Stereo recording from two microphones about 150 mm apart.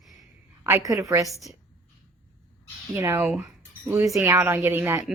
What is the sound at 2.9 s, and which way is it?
Speech, 15° right (ahead or behind).